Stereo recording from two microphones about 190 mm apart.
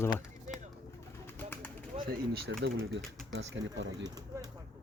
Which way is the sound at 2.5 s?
75° right (ahead or behind).